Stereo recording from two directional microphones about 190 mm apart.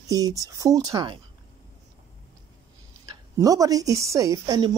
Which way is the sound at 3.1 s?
20° right (ahead or behind).